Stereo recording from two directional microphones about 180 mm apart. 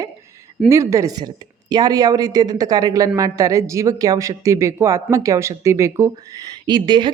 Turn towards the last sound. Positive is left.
turn(degrees=-25)  # may be behind; listen again after turning